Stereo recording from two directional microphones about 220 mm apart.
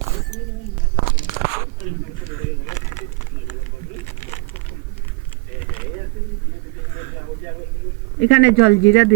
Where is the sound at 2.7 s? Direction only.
35° left (ahead or behind).